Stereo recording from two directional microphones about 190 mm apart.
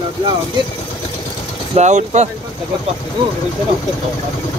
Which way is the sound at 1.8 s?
40° right (ahead or behind).